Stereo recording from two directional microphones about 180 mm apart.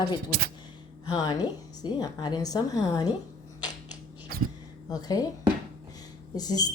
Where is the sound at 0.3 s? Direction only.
60° right (ahead or behind).